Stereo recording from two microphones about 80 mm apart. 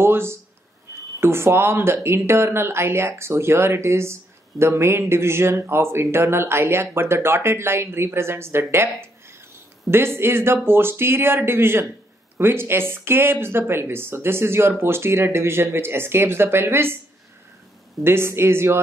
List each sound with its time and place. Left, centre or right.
0.0 s speech: right
18.0 s speech: right